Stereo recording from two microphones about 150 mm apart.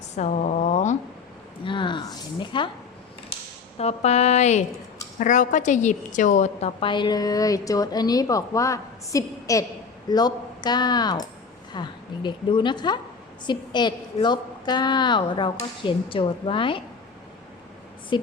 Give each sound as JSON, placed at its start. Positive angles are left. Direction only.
{"t": 0.2, "sound": "speech", "side_deg": 50}
{"t": 1.6, "sound": "a sound", "side_deg": 35}
{"t": 3.8, "sound": "a woman's voice", "side_deg": 45}
{"t": 18.1, "sound": "a woman's voice", "side_deg": 35}